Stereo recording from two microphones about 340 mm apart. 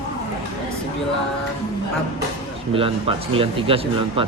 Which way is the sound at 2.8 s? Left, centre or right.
Centre.